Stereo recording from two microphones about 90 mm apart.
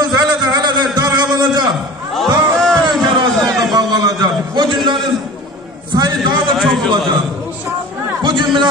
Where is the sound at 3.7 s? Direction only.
50° right (ahead or behind).